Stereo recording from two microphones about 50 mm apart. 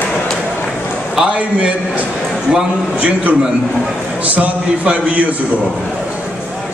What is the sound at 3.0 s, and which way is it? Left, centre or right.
A man's voice, right.